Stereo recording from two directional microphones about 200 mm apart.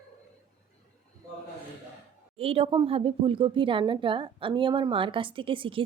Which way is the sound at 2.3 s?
30° right (ahead or behind).